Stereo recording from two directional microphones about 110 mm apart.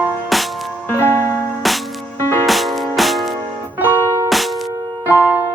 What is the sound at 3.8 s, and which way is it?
Music, 25° right (ahead or behind).